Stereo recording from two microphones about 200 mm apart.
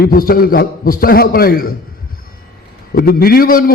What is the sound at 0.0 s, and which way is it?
A man's voice, 45° left (ahead or behind).